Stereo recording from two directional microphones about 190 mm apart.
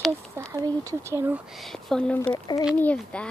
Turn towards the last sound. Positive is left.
turn(degrees=10)  # may be behind; listen again after turning